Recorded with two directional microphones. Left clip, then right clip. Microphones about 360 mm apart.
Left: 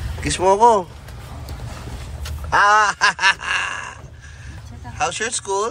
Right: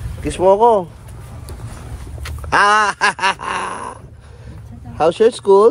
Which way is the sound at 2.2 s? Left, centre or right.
Right.